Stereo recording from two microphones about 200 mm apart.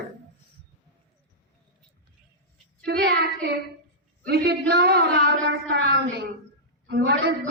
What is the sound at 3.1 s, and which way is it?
Speech, 55° right (ahead or behind).